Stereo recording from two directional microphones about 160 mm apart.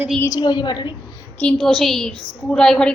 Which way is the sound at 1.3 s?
5° left (ahead or behind).